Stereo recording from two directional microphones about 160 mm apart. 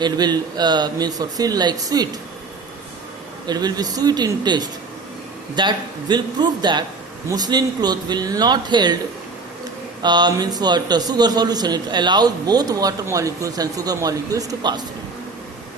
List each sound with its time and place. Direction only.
0.0 s a man's voice: 25° right (ahead or behind)
3.4 s a man's voice: 25° right (ahead or behind)
10.0 s a man's voice: 25° right (ahead or behind)